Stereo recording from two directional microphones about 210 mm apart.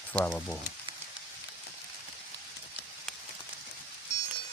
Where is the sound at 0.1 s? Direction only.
10° left (ahead or behind).